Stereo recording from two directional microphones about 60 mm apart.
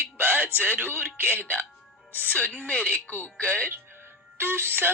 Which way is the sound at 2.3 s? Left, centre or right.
Left.